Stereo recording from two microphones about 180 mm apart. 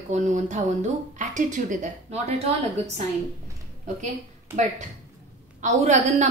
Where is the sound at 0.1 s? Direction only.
40° right (ahead or behind).